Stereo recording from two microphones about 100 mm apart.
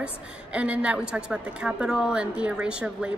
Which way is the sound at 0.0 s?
10° right (ahead or behind).